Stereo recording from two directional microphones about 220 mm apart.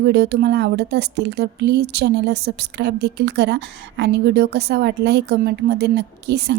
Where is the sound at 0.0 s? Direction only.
50° right (ahead or behind).